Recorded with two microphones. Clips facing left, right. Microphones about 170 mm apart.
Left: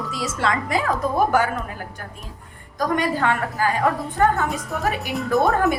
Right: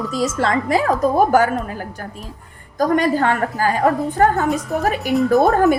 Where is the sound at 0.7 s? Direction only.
40° right (ahead or behind).